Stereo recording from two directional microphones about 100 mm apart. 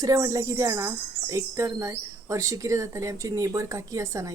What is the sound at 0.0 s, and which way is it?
A woman's voice, 35° right (ahead or behind).